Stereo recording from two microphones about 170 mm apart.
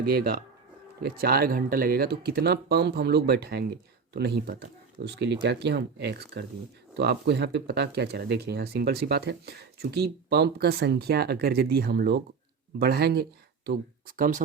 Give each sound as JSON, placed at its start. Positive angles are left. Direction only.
{"t": 0.0, "sound": "speech", "side_deg": -65}
{"t": 14.2, "sound": "speech", "side_deg": -50}